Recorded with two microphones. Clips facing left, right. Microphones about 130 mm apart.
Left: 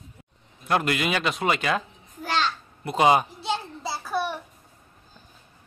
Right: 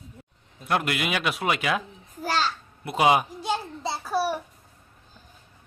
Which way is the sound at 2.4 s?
5° right (ahead or behind).